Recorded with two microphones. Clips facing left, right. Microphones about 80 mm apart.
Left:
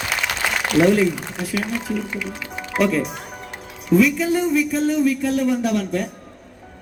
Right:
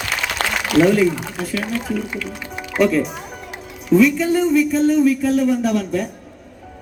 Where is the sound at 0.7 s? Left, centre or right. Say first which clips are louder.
Right 2 dB; centre.